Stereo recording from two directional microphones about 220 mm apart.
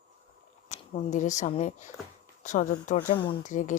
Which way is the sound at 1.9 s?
Centre (ahead or behind).